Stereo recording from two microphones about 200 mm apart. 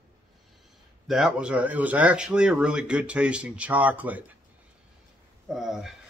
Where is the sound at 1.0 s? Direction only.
Centre (ahead or behind).